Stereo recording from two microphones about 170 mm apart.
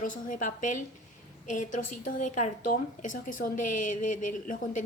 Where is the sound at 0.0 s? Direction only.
50° left (ahead or behind).